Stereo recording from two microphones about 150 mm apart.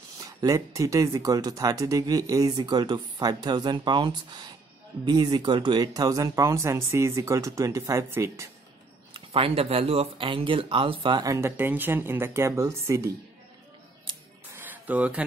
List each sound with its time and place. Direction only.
0.2 s speech: 25° right (ahead or behind)
9.1 s speech: 40° right (ahead or behind); by 13.1 s 20° right (ahead or behind)
14.1 s music: 30° right (ahead or behind)
14.5 s music: 15° right (ahead or behind)